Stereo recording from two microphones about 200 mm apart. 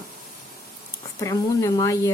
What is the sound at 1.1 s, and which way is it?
Speech, 15° left (ahead or behind).